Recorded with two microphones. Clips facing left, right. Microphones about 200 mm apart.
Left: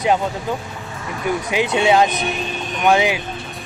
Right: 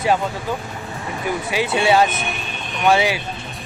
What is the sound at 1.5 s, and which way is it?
Speech, 15° left (ahead or behind).